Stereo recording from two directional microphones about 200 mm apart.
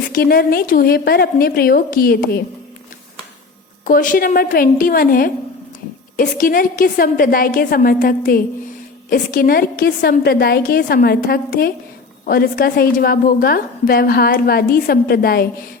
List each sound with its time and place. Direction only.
0.1 s a woman's voice: 50° left (ahead or behind)
3.8 s a woman's voice: 45° left (ahead or behind)